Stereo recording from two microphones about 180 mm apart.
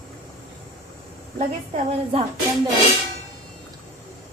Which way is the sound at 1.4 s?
35° right (ahead or behind).